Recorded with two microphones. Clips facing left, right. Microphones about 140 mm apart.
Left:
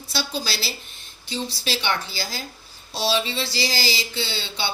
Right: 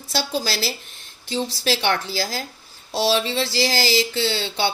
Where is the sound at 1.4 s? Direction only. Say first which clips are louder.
Right 4 dB; 90° right.